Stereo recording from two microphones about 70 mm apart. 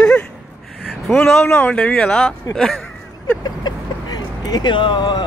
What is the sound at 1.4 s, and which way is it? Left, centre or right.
Speech, left.